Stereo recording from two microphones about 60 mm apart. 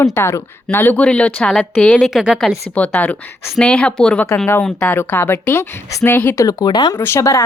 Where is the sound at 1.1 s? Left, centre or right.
Centre.